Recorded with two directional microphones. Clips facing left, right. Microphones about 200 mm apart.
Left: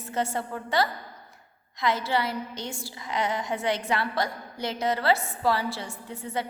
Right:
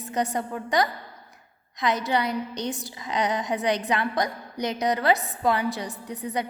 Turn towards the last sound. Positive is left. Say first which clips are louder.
# right 3 dB
turn(degrees=-15)  # may be behind; listen again after turning